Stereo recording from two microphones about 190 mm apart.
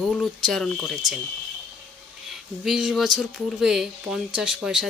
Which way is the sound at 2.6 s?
Centre (ahead or behind).